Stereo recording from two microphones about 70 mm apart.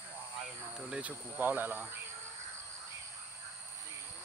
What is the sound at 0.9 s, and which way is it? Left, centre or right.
Speech, centre.